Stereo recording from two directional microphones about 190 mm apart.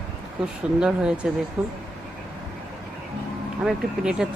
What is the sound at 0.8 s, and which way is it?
Speech, 5° right (ahead or behind).